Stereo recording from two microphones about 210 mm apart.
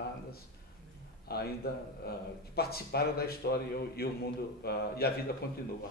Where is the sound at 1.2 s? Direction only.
50° left (ahead or behind).